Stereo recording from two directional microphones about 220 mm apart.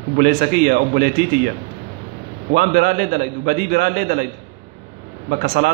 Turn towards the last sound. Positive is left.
turn(degrees=-40)  # may be behind; listen again after turning